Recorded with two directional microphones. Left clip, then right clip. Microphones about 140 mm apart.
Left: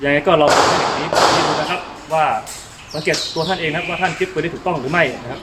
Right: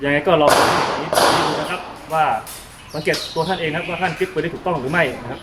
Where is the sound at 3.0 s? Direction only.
10° left (ahead or behind).